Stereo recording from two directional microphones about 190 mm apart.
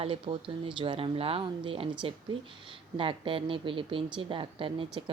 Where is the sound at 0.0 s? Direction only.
30° right (ahead or behind).